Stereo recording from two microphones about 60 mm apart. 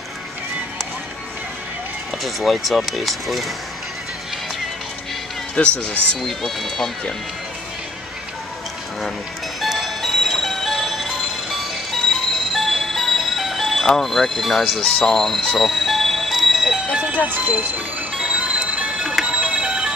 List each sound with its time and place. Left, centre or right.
2.2 s speech: centre
5.6 s speech: left
6.2 s speech: centre
9.6 s music: centre
16.9 s speech: centre
18.1 s music: centre